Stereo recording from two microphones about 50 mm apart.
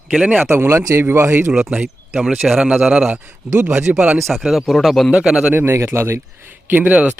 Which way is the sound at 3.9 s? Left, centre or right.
Right.